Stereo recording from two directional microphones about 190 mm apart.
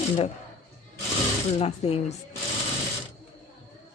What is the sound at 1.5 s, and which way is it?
Speech, 35° left (ahead or behind).